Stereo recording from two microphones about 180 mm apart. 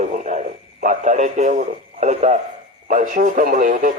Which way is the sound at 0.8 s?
40° right (ahead or behind).